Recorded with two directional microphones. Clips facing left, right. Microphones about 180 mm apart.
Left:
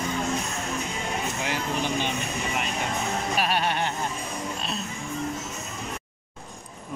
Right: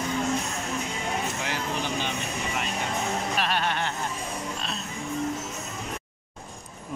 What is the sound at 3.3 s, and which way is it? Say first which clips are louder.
Music: left 4 dB; 10° left (ahead or behind).